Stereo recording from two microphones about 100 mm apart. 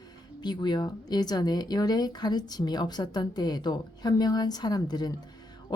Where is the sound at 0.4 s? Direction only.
45° left (ahead or behind).